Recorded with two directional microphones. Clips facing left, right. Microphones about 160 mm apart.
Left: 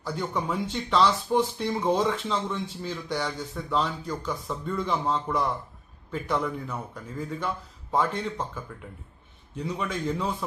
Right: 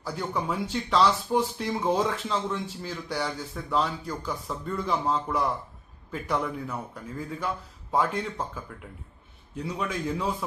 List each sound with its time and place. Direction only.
0.0 s a man's voice: 5° right (ahead or behind)